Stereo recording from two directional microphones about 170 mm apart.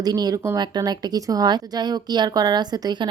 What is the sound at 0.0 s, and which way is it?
Speech, 25° right (ahead or behind).